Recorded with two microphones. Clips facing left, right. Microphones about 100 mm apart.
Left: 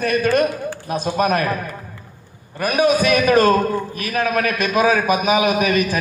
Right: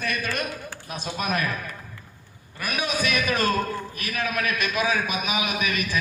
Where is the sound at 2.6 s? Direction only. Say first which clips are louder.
Left 11 dB; 45° left (ahead or behind).